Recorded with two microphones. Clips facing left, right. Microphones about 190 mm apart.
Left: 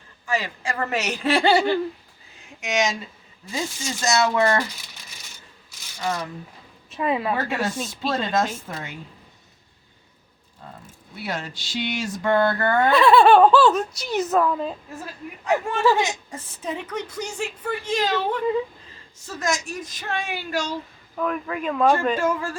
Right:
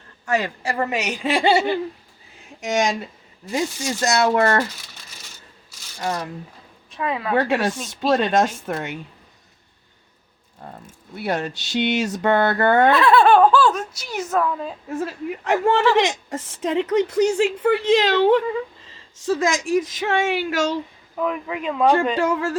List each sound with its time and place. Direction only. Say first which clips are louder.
0.3 s speech: right 4 dB; 65° right (ahead or behind)
0.6 s a woman's voice: right 4 dB; 35° right (ahead or behind)
0.9 s speech: even; 15° right (ahead or behind)
2.6 s speech: right 3 dB; 45° right (ahead or behind)
4.0 s speech: right 2 dB; 60° right (ahead or behind)
6.0 s speech: right 1 dB; 50° right (ahead or behind)
6.9 s a woman's voice: left 2 dB; 5° left (ahead or behind)
7.3 s speech: right 5 dB; 75° right (ahead or behind)
10.6 s speech: right 3 dB; 60° right (ahead or behind)
12.9 s speech: left 5 dB; centre (ahead or behind)
14.8 s a woman's voice: right 10 dB; 85° right
21.2 s speech: right 1 dB; 10° right (ahead or behind)
22.2 s speech: right 3 dB; 70° right (ahead or behind)